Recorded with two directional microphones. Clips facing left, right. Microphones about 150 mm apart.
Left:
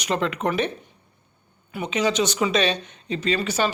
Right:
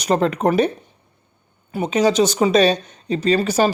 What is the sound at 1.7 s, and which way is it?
Speech, 40° right (ahead or behind).